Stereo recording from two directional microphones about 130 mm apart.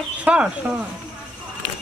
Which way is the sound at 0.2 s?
10° right (ahead or behind).